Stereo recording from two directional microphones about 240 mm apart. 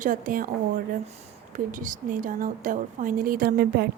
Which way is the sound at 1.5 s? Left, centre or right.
Right.